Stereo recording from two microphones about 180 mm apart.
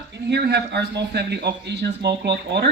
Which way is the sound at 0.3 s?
65° right (ahead or behind).